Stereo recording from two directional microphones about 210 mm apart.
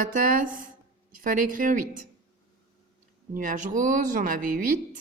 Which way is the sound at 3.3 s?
40° right (ahead or behind).